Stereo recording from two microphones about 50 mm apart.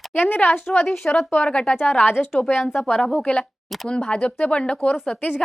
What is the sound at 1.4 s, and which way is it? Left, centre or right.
Speech, centre.